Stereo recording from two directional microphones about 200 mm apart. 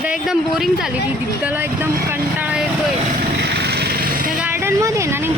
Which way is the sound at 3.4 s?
55° right (ahead or behind).